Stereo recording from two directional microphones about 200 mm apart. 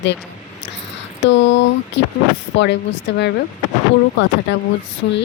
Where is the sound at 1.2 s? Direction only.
65° left (ahead or behind).